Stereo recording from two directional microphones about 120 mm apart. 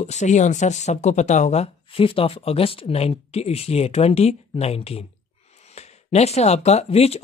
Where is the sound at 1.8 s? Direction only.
50° left (ahead or behind).